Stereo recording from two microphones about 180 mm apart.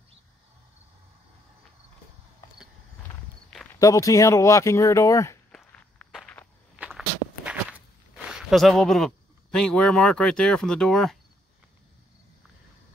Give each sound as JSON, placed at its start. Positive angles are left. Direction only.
{"t": 3.8, "sound": "speech", "side_deg": 20}
{"t": 5.5, "sound": "walk", "side_deg": 5}
{"t": 6.8, "sound": "walk", "side_deg": -5}